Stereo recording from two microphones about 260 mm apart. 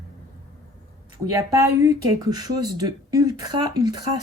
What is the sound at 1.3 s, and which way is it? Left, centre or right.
A woman's voice, centre.